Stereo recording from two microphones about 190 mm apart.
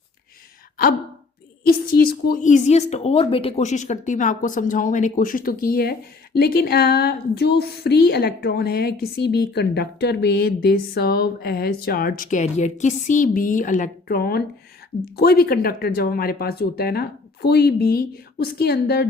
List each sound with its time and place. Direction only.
1.6 s a woman's voice: 50° left (ahead or behind)